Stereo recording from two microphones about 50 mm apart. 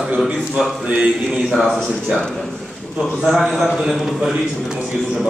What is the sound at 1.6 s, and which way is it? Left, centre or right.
Speech, centre.